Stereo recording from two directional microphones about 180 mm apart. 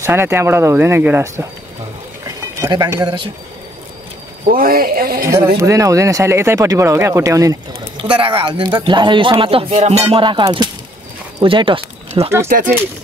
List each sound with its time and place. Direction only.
0.0 s speech: 15° right (ahead or behind)
4.5 s speech: 50° right (ahead or behind)
5.6 s speech: 20° right (ahead or behind)
8.0 s speech: 30° right (ahead or behind)
12.4 s speech: 50° right (ahead or behind)